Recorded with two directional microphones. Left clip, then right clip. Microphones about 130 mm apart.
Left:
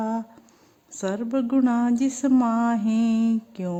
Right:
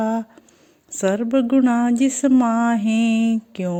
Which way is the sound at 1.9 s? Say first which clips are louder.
Right 5 dB; 5° right (ahead or behind).